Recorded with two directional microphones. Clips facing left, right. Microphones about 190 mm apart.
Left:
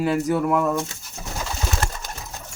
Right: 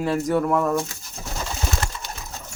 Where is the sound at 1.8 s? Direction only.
55° left (ahead or behind).